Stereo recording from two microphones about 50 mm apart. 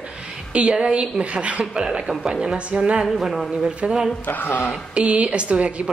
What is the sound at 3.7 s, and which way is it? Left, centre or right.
Speech, centre.